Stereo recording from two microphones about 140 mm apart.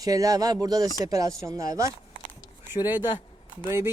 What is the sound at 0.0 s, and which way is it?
Speech, 25° right (ahead or behind).